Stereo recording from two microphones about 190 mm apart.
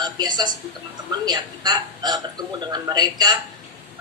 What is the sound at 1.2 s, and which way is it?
A woman's voice, 20° right (ahead or behind).